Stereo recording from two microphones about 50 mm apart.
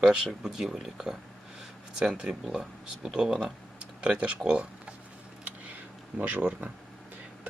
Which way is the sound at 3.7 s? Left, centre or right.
Right.